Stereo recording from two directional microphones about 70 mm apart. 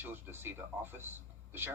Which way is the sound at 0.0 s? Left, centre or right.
Right.